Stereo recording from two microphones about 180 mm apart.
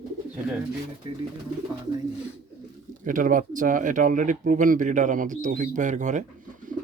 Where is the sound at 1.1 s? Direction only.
30° right (ahead or behind).